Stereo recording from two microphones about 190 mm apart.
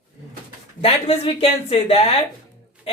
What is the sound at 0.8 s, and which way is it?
Speech, 30° left (ahead or behind).